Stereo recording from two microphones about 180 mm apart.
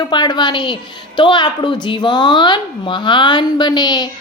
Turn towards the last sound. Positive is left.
turn(degrees=20)  # may be behind; listen again after turning